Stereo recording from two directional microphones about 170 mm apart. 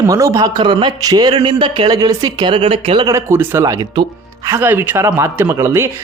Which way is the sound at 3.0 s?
15° right (ahead or behind).